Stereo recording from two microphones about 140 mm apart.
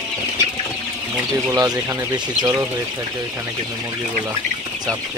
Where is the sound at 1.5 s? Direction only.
25° right (ahead or behind).